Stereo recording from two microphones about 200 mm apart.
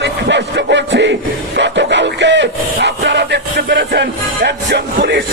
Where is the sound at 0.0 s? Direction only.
60° right (ahead or behind).